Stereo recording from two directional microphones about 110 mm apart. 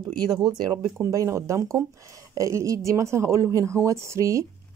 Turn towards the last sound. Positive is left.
turn(degrees=-25)  # may be behind; listen again after turning